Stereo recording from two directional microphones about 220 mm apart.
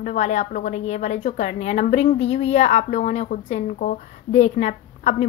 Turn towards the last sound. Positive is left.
turn(degrees=35)  # may be behind; listen again after turning